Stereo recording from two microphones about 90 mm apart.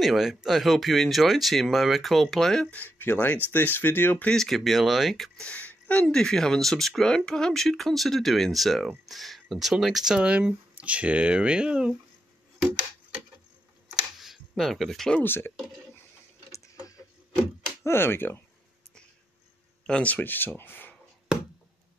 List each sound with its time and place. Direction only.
0.0 s speech: 5° right (ahead or behind)
2.7 s speech: 20° left (ahead or behind)
4.3 s speech: 5° left (ahead or behind)
5.4 s a sound: 15° left (ahead or behind)
6.0 s speech: 5° left (ahead or behind); by 11.9 s 10° right (ahead or behind)
14.5 s speech: centre (ahead or behind)
15.2 s speech: 25° left (ahead or behind)
16.5 s a sound: 40° left (ahead or behind)
17.8 s speech: 25° left (ahead or behind)
19.9 s speech: 15° left (ahead or behind)